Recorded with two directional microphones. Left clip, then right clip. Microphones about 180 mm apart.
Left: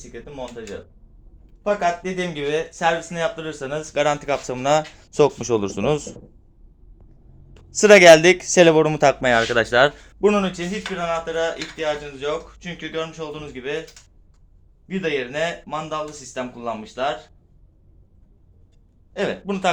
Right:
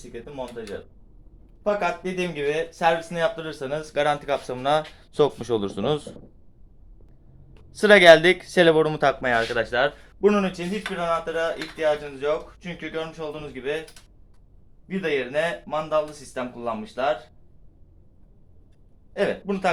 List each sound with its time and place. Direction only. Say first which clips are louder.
1.6 s speech: left 3 dB; centre (ahead or behind)
3.9 s speech: left 3 dB; 25° left (ahead or behind)
5.2 s speech: left 4 dB; 10° left (ahead or behind)
7.8 s speech: left 3 dB; 25° left (ahead or behind)
9.3 s speech: left 5 dB; 50° left (ahead or behind)
10.0 s speech: left 2 dB; 30° left (ahead or behind)
10.7 s speech: left 1 dB; 5° left (ahead or behind)
14.8 s speech: left 1 dB; 5° left (ahead or behind)
19.1 s speech: even; 5° left (ahead or behind)